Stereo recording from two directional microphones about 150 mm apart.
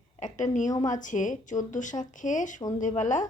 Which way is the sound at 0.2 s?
55° left (ahead or behind).